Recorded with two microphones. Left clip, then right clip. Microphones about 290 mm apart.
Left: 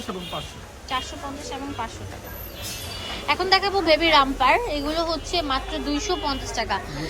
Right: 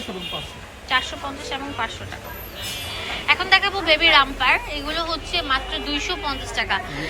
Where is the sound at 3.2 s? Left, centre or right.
Centre.